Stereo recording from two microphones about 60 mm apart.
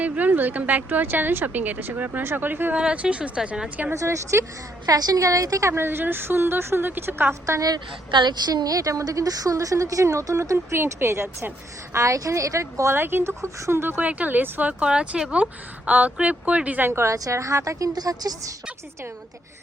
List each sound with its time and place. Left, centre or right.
0.0 s a woman's voice: right
2.7 s speech: centre
3.9 s speech: right
4.9 s a woman's voice: right
5.7 s a woman's voice: right
7.4 s a woman's voice: right
8.4 s a woman's voice: right
11.9 s speech: right
12.9 s a woman's voice: right
13.4 s speech: right
13.9 s speech: right
14.7 s speech: centre
16.8 s speech: right
17.2 s a woman's voice: right